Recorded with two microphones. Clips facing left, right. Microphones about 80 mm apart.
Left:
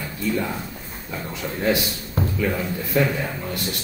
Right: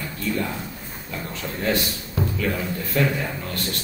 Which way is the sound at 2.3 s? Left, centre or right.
Centre.